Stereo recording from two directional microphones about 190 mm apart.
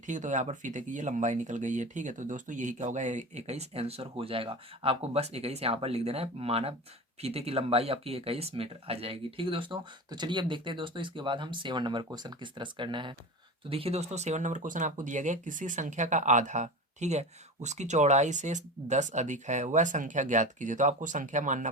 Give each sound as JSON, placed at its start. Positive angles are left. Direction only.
{"t": 0.0, "sound": "speech", "side_deg": -40}